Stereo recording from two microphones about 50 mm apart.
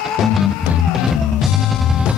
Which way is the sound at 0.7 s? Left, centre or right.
Right.